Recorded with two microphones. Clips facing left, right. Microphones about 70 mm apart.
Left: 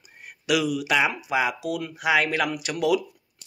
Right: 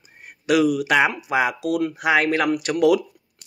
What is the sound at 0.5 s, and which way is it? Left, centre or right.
Speech, right.